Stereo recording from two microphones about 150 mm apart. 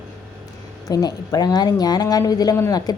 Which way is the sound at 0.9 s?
25° left (ahead or behind).